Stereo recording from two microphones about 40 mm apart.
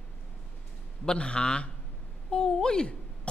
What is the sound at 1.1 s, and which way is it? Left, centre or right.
Speech, left.